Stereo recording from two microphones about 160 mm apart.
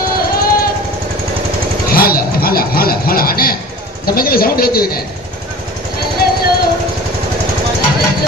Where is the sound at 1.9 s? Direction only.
70° left (ahead or behind).